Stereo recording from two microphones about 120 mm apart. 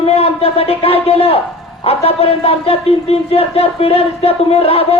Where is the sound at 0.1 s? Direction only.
55° left (ahead or behind).